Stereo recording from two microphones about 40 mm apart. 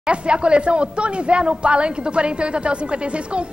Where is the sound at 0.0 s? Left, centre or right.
Right.